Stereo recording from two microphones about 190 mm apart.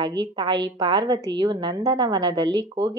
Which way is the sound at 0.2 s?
25° right (ahead or behind).